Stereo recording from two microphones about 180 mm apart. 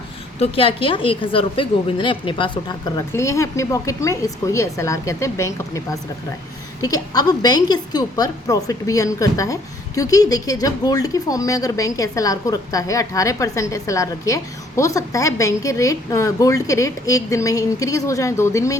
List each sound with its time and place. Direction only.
0.3 s a woman's voice: 35° left (ahead or behind)
3.1 s a woman's voice: 15° left (ahead or behind)